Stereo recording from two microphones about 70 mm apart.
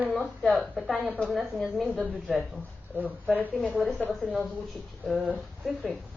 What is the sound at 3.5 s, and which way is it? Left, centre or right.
Speech, centre.